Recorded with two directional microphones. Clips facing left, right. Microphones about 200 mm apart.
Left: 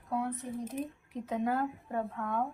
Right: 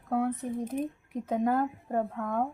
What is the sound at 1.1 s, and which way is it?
Speech, 45° right (ahead or behind).